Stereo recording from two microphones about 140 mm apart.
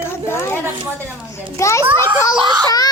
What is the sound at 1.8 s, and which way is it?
Speech, 15° right (ahead or behind).